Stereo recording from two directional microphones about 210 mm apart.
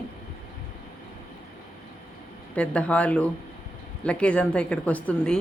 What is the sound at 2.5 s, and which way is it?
Speech, 5° left (ahead or behind).